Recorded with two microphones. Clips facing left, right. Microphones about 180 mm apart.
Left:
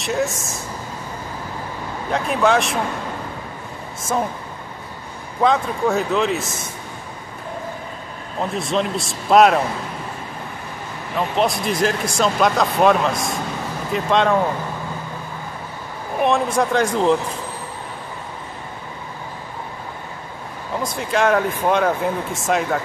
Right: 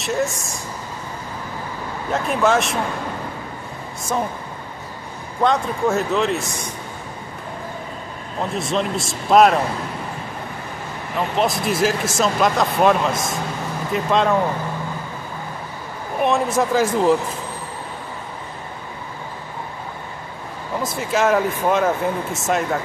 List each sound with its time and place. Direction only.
0.0 s speech: centre (ahead or behind)
2.0 s speech: centre (ahead or behind)
5.4 s speech: centre (ahead or behind)
8.4 s speech: centre (ahead or behind)
11.3 s speech: centre (ahead or behind)
16.2 s speech: centre (ahead or behind)
20.8 s speech: 5° right (ahead or behind)